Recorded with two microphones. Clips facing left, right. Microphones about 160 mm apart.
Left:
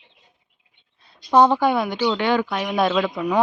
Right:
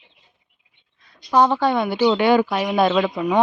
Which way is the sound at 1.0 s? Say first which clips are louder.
Left 3 dB; 30° left (ahead or behind).